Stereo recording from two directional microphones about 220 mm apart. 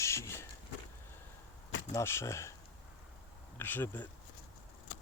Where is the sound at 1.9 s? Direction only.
10° left (ahead or behind).